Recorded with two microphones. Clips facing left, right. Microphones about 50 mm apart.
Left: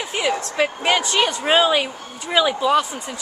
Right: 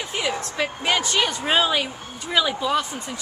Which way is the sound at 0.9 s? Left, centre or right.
Centre.